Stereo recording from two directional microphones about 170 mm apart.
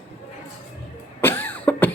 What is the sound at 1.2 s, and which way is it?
Cough, 15° left (ahead or behind).